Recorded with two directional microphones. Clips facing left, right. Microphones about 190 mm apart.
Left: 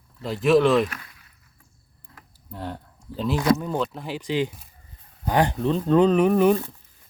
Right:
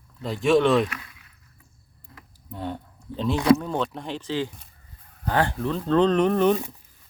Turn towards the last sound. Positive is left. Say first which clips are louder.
# left 2 dB
turn(degrees=5)  # may be behind; listen again after turning